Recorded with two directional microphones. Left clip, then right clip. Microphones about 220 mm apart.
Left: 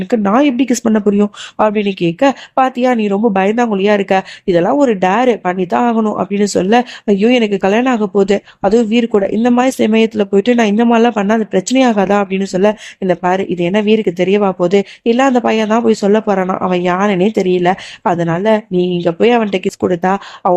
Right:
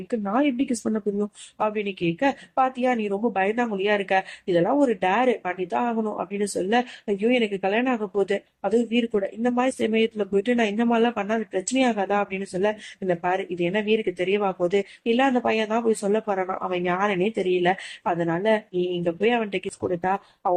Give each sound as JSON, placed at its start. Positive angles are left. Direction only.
{"t": 0.1, "sound": "speech", "side_deg": 35}